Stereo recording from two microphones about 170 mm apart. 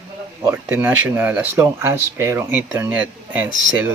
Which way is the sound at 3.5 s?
25° left (ahead or behind).